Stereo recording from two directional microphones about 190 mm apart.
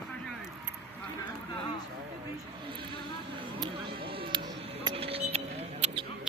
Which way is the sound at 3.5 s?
25° right (ahead or behind).